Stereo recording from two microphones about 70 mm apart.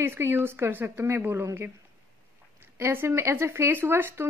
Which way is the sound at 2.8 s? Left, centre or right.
Right.